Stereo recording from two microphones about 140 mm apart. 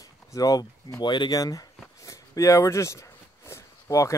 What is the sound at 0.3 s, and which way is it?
Speech, 25° left (ahead or behind).